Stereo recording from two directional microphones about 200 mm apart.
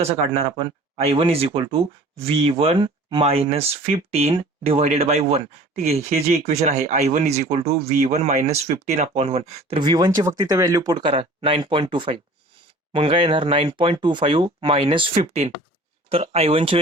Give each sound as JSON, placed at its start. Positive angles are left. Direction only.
{"t": 0.6, "sound": "speech", "side_deg": -30}